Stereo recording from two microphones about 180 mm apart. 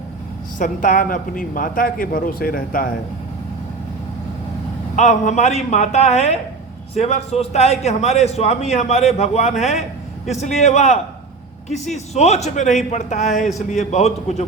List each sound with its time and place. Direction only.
0.6 s speech: 45° left (ahead or behind)
4.9 s a man's voice: 40° left (ahead or behind)